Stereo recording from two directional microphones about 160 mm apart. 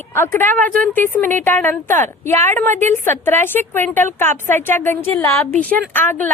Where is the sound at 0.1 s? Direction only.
15° left (ahead or behind).